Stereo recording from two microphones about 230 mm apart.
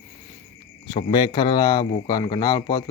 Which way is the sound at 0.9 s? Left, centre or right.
Centre.